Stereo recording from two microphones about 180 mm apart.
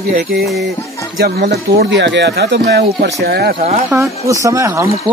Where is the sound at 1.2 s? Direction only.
60° right (ahead or behind).